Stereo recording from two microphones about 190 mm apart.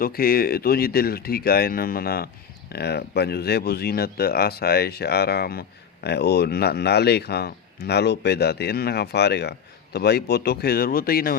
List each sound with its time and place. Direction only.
0.0 s speech: 50° left (ahead or behind)